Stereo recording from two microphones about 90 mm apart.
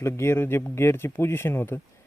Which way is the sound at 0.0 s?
30° left (ahead or behind).